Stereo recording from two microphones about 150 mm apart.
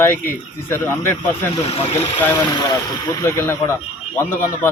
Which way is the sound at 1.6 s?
40° left (ahead or behind).